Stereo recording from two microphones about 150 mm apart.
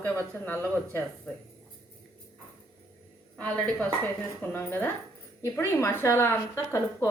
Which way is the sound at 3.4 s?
5° left (ahead or behind).